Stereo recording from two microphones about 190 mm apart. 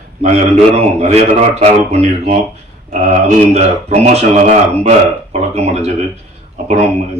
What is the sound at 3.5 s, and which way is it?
Speech, 35° right (ahead or behind).